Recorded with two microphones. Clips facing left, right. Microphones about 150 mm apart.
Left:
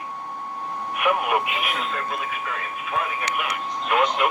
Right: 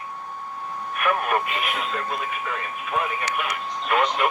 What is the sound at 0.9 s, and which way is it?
Speech, 15° left (ahead or behind).